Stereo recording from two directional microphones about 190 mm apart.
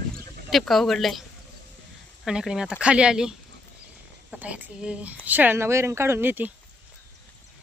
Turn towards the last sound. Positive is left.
turn(degrees=-10)  # may be behind; listen again after turning